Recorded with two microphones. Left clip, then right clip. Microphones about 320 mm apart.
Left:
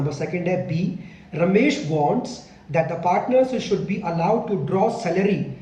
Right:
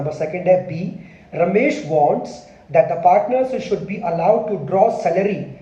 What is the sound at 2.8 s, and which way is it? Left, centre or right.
A man's voice, centre.